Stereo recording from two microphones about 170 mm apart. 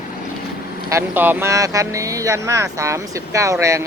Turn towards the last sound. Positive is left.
turn(degrees=-15)  # may be behind; listen again after turning